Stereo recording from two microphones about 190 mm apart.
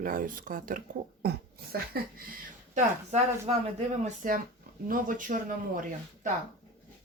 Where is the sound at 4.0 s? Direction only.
45° right (ahead or behind).